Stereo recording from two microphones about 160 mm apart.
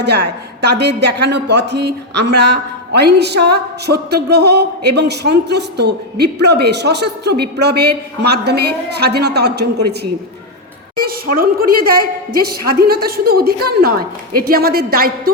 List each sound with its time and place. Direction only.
0.7 s speech: 90° right
11.0 s a woman's voice: 65° right (ahead or behind)